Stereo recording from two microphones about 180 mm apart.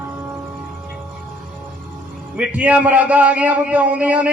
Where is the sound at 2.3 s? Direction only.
5° right (ahead or behind).